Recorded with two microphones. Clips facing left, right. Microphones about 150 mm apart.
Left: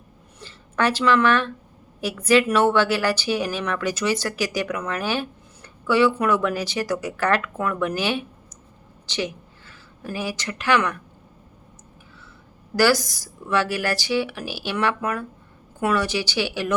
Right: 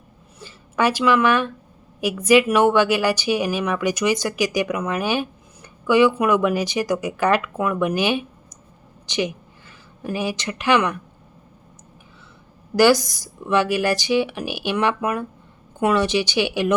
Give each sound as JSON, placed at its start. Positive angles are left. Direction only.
{"t": 0.3, "sound": "a sound", "side_deg": -10}
{"t": 2.0, "sound": "speech", "side_deg": -15}
{"t": 12.7, "sound": "speech", "side_deg": -20}